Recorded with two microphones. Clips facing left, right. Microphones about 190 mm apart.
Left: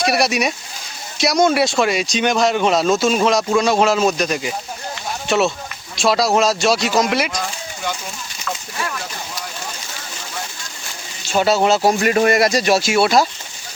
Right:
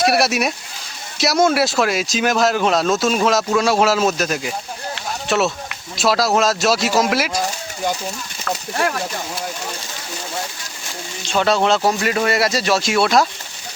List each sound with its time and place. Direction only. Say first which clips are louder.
0.0 s speech: right 1 dB; centre (ahead or behind)
11.3 s speech: left 1 dB; 5° left (ahead or behind)
12.0 s speech: left 4 dB; 40° left (ahead or behind)
12.5 s speech: left 3 dB; 15° left (ahead or behind)
12.8 s speech: left 1 dB; centre (ahead or behind)